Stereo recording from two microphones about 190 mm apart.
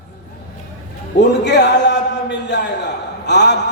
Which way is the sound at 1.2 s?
65° left (ahead or behind).